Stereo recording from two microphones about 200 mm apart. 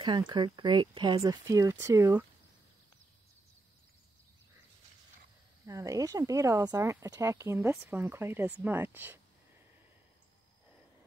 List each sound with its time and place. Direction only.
0.0 s speech: 20° right (ahead or behind)
5.7 s speech: 15° right (ahead or behind)